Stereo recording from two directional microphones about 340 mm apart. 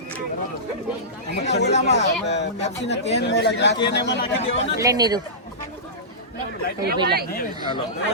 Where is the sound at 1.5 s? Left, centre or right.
Left.